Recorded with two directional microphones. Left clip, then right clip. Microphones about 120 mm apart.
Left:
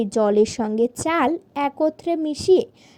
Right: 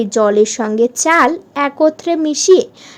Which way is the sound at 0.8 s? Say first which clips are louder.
Right 9 dB; 30° left (ahead or behind).